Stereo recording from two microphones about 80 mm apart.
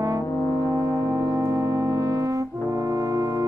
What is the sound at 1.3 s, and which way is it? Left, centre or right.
Brass instrument, right.